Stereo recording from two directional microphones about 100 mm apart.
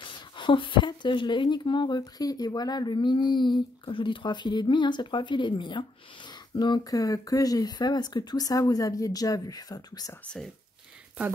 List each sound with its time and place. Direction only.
0.0 s a woman's voice: 55° left (ahead or behind); by 10.1 s 40° left (ahead or behind)
10.2 s speech: 10° left (ahead or behind)